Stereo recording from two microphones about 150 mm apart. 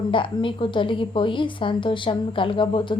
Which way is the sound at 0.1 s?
35° left (ahead or behind).